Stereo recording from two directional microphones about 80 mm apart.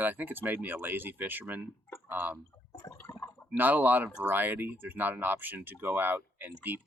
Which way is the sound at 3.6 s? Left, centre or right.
Right.